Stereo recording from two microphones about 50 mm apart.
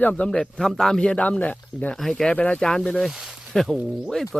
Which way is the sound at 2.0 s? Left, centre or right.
Centre.